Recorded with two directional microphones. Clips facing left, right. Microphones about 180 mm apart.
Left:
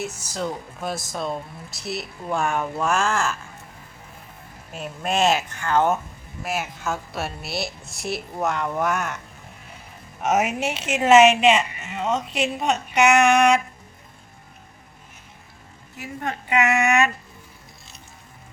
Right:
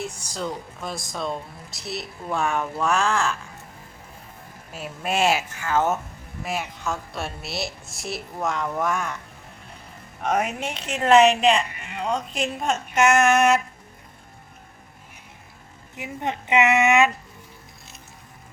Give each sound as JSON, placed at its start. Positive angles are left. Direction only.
{"t": 0.0, "sound": "speech", "side_deg": 5}
{"t": 4.7, "sound": "a woman's voice", "side_deg": -5}
{"t": 10.2, "sound": "a woman's voice", "side_deg": 5}
{"t": 16.0, "sound": "a woman's voice", "side_deg": -20}